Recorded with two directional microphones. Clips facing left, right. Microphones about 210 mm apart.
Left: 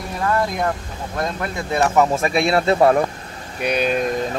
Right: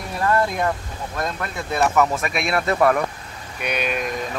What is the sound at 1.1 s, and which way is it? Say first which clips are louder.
Speech: left 3 dB; 20° left (ahead or behind).